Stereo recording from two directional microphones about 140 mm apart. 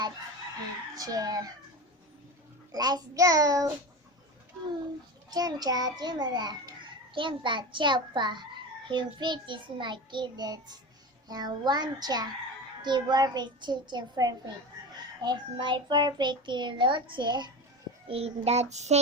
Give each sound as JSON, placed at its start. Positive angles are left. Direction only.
{"t": 0.9, "sound": "a child's voice", "side_deg": -25}
{"t": 2.7, "sound": "a child's voice", "side_deg": -30}
{"t": 5.3, "sound": "a child's voice", "side_deg": -30}
{"t": 18.1, "sound": "child singing", "side_deg": -50}